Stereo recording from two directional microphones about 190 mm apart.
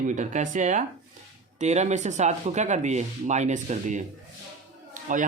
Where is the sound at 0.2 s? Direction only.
40° right (ahead or behind).